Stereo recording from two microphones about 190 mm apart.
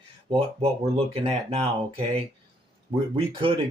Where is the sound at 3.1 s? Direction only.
30° right (ahead or behind).